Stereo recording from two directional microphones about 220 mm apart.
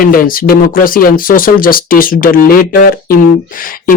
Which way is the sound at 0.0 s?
40° left (ahead or behind).